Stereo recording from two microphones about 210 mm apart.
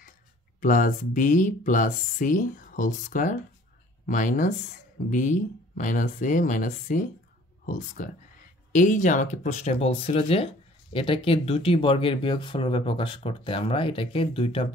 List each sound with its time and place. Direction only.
0.6 s speech: 40° left (ahead or behind)